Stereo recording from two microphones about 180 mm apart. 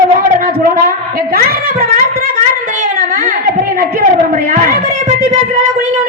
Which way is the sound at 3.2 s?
50° right (ahead or behind).